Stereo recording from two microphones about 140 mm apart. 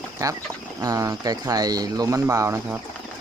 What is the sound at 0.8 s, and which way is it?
Speech, 25° right (ahead or behind).